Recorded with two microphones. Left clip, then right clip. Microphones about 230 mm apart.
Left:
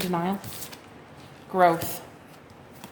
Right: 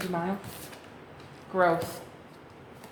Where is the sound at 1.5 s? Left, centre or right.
Left.